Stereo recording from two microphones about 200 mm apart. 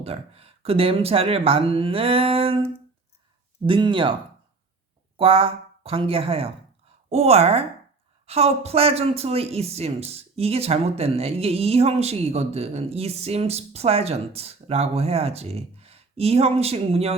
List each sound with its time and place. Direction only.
0.0 s speech: 30° right (ahead or behind)
5.1 s a woman's voice: 25° right (ahead or behind)